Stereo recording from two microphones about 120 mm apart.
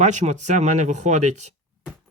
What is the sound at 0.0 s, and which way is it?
Speech, 80° right.